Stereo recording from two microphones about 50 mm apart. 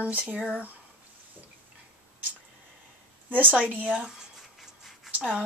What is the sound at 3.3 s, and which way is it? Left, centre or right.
Speech, right.